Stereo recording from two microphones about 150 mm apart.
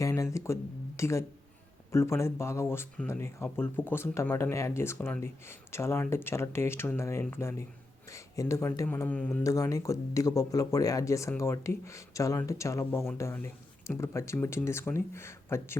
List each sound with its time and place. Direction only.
0.0 s speech: 20° left (ahead or behind)
9.4 s speech: 20° left (ahead or behind)